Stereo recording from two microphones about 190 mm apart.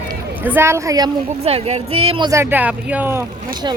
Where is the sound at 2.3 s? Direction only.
10° right (ahead or behind).